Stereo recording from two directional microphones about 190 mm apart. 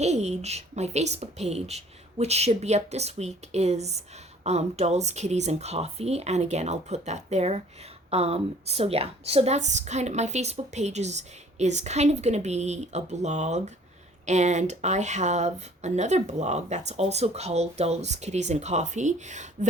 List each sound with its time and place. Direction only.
0.0 s a woman's voice: 35° right (ahead or behind)